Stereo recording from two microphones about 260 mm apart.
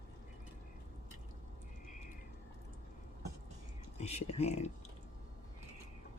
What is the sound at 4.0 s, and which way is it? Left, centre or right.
Speech, left.